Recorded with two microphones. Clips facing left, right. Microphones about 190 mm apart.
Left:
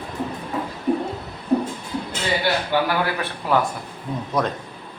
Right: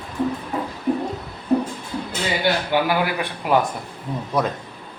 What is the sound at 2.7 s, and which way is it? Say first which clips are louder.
A man's voice: right 1 dB; 15° right (ahead or behind).